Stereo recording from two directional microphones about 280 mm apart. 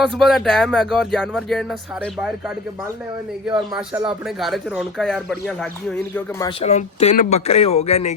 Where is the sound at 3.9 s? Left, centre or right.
Centre.